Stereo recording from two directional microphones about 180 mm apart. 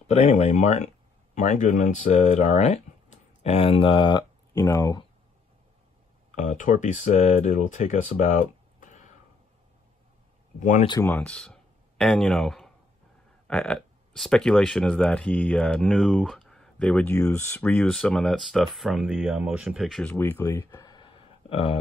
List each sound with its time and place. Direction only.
0.0 s speech: 35° left (ahead or behind); by 5.0 s 20° left (ahead or behind)
6.3 s speech: 45° left (ahead or behind)
10.6 s speech: 45° left (ahead or behind)
10.9 s speech: 15° left (ahead or behind); by 21.7 s 30° left (ahead or behind)